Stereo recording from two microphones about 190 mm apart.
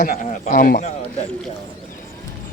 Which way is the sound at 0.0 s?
50° left (ahead or behind).